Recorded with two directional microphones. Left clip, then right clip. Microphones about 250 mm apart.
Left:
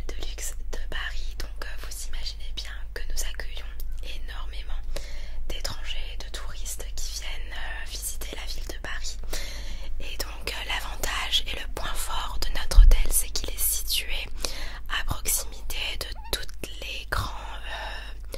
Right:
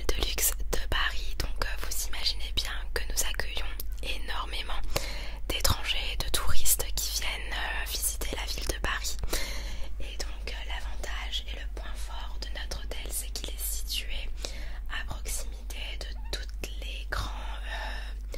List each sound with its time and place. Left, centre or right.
0.0 s whispering: right
10.4 s whispering: left